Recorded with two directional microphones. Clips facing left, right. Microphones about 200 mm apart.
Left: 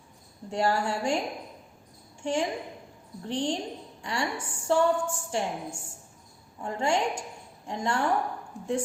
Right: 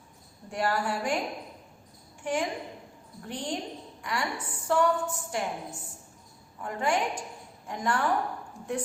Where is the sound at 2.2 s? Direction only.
25° left (ahead or behind).